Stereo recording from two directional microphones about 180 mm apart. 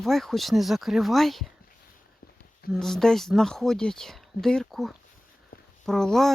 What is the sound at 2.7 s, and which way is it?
Speech, centre (ahead or behind).